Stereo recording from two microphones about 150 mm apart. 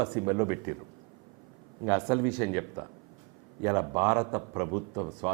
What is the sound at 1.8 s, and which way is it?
A man's voice, 20° right (ahead or behind).